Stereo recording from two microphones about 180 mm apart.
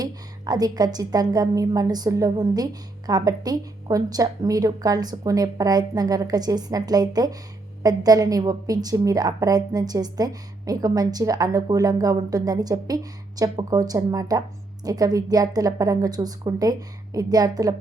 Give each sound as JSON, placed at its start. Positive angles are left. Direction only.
{"t": 0.0, "sound": "a woman's voice", "side_deg": -20}